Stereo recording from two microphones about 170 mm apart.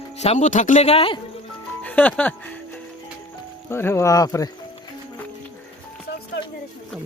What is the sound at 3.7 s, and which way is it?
Speech, 15° left (ahead or behind).